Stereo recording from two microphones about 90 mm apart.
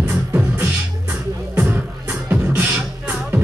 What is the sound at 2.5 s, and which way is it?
Beatboxing, 20° right (ahead or behind).